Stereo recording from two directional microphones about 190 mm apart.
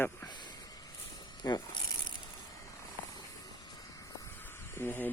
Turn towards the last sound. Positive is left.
turn(degrees=10)  # may be behind; listen again after turning